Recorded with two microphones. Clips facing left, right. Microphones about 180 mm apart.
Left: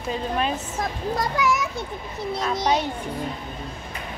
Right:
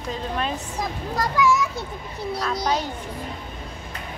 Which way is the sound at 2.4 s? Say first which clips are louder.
Left 2 dB; 15° left (ahead or behind).